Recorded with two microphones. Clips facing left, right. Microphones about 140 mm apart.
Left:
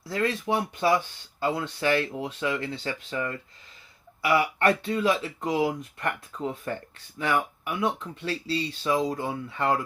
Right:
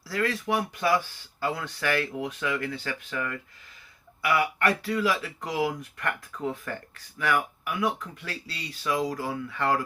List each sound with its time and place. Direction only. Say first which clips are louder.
0.0 s speech: left 1 dB; 25° left (ahead or behind)